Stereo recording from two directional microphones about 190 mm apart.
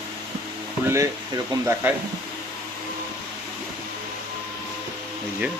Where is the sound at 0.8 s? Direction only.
15° right (ahead or behind).